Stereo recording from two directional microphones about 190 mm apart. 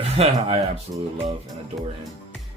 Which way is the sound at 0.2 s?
30° right (ahead or behind).